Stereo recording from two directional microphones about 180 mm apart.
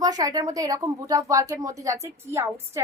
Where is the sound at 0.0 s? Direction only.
20° right (ahead or behind).